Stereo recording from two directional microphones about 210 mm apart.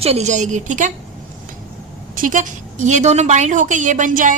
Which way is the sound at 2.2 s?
40° right (ahead or behind).